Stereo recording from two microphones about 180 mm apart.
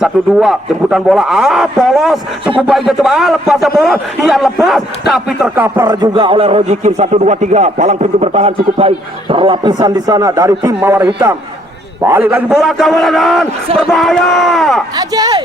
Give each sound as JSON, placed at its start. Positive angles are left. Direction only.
{"t": 0.0, "sound": "a man's voice", "side_deg": -5}
{"t": 14.9, "sound": "a man's voice", "side_deg": -20}